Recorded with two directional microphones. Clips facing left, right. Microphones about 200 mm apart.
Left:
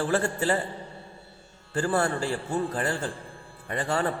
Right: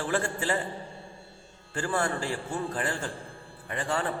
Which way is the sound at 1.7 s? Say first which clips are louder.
Left 4 dB; 40° left (ahead or behind).